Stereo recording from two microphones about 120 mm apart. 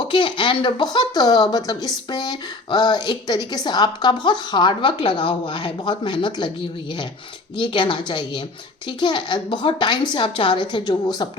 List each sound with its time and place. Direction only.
0.0 s speech: 45° left (ahead or behind)
7.5 s speech: 40° left (ahead or behind)